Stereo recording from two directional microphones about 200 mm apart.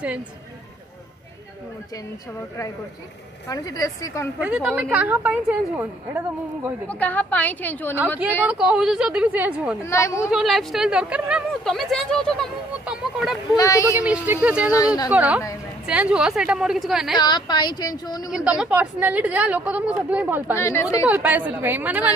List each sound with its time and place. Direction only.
3.4 s a woman's voice: 20° left (ahead or behind)
4.4 s a woman's voice: 5° right (ahead or behind)
6.9 s a woman's voice: 10° left (ahead or behind)
8.2 s speech: 5° right (ahead or behind)
9.8 s a woman's voice: 15° left (ahead or behind)
10.3 s speech: centre (ahead or behind)
13.6 s a woman's voice: 15° left (ahead or behind)
13.9 s a woman's voice: 10° right (ahead or behind)
17.2 s a woman's voice: 20° left (ahead or behind)
18.3 s a woman's voice: 5° right (ahead or behind)
20.5 s a woman's voice: 15° left (ahead or behind)
21.1 s a woman's voice: 10° right (ahead or behind)